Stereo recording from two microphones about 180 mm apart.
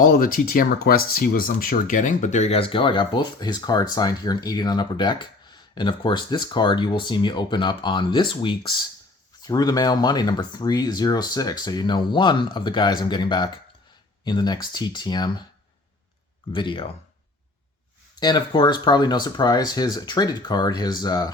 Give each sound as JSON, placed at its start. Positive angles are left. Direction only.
{"t": 0.0, "sound": "speech", "side_deg": 50}
{"t": 16.5, "sound": "speech", "side_deg": 25}
{"t": 18.2, "sound": "speech", "side_deg": 25}